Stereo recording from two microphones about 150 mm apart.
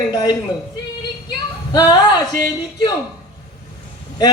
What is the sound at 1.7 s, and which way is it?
A man's voice, 25° left (ahead or behind).